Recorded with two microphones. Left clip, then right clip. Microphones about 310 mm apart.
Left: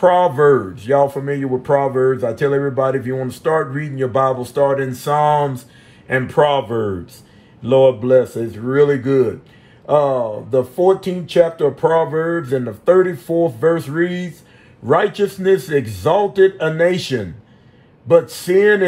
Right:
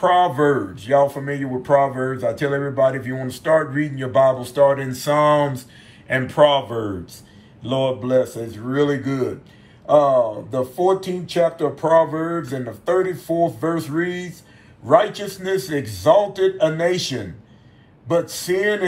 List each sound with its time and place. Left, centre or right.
0.0 s speech: centre
7.6 s speech: centre